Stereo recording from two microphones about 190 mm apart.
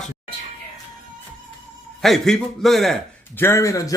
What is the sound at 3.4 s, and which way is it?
Speech, 15° left (ahead or behind).